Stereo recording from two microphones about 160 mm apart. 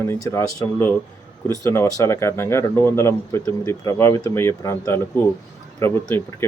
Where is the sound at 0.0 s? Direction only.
15° left (ahead or behind).